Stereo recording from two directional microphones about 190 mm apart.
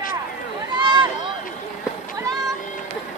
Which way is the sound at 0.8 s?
25° right (ahead or behind).